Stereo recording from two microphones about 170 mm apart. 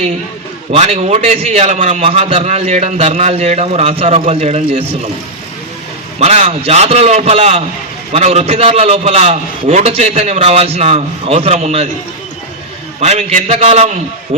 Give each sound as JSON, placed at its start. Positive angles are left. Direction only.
{"t": 0.7, "sound": "a man's voice", "side_deg": -40}
{"t": 6.1, "sound": "a man's voice", "side_deg": -35}
{"t": 13.0, "sound": "a man's voice", "side_deg": -40}